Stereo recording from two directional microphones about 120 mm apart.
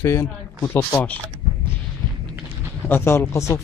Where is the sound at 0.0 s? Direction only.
25° left (ahead or behind).